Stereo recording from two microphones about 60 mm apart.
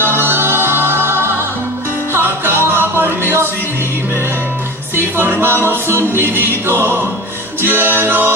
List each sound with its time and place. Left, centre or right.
0.0 s music: right
4.9 s music: right